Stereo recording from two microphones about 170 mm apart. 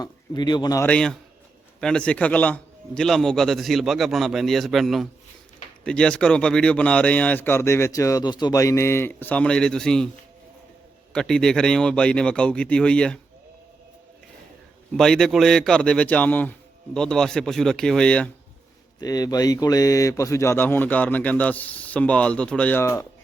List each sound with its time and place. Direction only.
0.0 s a man's voice: 25° left (ahead or behind)
0.9 s a man's voice: 5° left (ahead or behind)
11.1 s a man's voice: 5° left (ahead or behind)
14.9 s a man's voice: 5° left (ahead or behind)
18.9 s speech: 20° left (ahead or behind)